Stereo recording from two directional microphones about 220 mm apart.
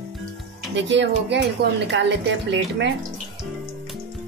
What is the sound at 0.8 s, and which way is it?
Speech, 55° right (ahead or behind).